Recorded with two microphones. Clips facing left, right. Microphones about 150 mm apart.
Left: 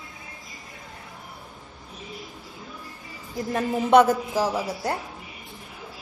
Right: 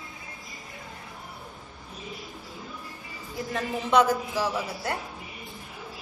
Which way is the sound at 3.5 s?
45° left (ahead or behind).